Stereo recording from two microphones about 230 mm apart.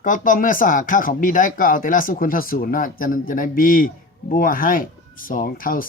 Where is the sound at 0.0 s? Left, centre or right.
Left.